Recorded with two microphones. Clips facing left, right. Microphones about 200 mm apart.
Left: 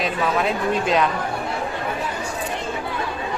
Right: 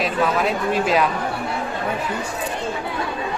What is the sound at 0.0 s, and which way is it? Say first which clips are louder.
Speech: right 1 dB; centre (ahead or behind).